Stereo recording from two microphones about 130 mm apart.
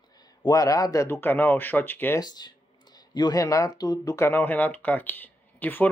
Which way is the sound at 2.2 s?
30° left (ahead or behind).